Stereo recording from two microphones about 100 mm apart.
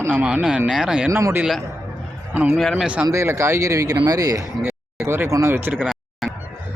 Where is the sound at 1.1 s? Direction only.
25° right (ahead or behind).